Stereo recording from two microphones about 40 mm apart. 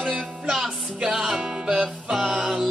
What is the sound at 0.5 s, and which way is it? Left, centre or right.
Music, centre.